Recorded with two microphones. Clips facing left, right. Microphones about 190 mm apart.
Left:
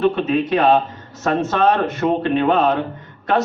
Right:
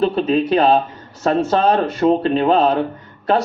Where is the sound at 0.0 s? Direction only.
35° right (ahead or behind).